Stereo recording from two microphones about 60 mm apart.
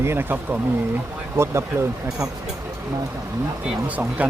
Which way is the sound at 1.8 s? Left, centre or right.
Right.